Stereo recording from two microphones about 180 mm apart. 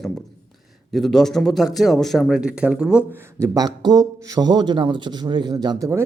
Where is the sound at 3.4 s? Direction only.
20° right (ahead or behind).